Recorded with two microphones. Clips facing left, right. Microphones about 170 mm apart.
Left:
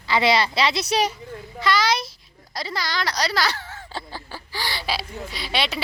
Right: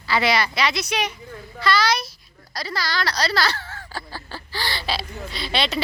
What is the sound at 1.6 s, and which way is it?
A woman's voice, 20° left (ahead or behind).